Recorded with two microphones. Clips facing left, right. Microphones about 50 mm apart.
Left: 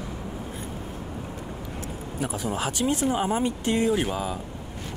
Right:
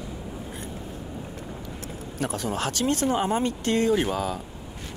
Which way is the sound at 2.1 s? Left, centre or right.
Centre.